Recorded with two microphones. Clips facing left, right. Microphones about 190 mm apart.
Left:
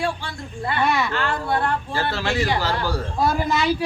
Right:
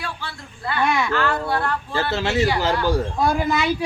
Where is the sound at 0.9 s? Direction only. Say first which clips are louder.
Right 1 dB; centre (ahead or behind).